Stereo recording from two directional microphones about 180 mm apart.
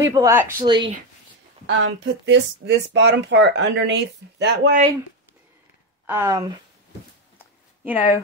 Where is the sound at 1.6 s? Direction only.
85° right.